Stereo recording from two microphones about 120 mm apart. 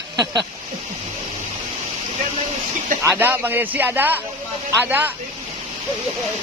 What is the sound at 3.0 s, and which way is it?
Speech, 20° right (ahead or behind).